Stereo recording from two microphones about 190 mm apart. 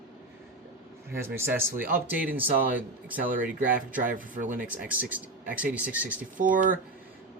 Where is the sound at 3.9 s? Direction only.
45° right (ahead or behind).